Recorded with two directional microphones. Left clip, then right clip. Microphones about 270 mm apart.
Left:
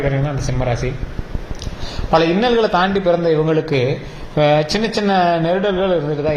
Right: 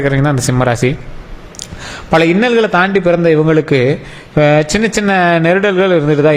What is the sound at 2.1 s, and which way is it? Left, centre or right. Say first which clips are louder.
Speech: right 4 dB; right.